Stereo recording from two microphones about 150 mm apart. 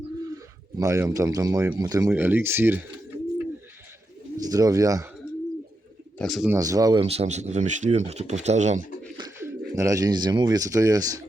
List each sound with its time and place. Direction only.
0.8 s speech: 20° right (ahead or behind)
4.4 s speech: 25° right (ahead or behind)
6.1 s speech: centre (ahead or behind)
6.5 s speech: 25° right (ahead or behind)
7.0 s speech: 45° right (ahead or behind)
9.4 s speech: 20° right (ahead or behind)